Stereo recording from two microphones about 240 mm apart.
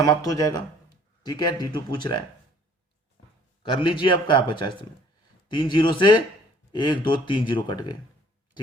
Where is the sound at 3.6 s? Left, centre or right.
Left.